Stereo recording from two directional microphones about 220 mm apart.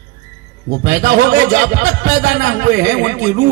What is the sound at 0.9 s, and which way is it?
A man's voice, 55° right (ahead or behind).